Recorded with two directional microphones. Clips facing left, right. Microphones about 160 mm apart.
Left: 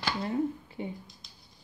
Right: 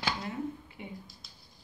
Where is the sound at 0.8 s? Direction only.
35° left (ahead or behind).